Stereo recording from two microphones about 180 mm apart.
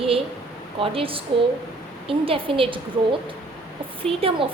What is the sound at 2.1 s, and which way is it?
Female singing, 30° right (ahead or behind).